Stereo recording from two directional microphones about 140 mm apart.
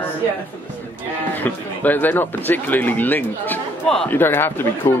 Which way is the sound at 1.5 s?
15° left (ahead or behind).